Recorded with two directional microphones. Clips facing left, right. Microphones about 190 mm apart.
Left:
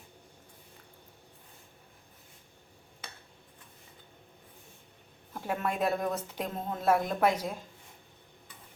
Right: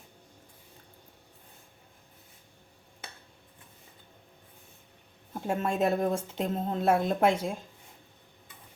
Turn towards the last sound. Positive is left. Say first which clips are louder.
# right 3 dB
turn(degrees=-25)  # may be behind; listen again after turning